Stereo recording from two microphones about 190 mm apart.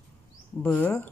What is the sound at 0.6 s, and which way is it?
Speech, 5° left (ahead or behind).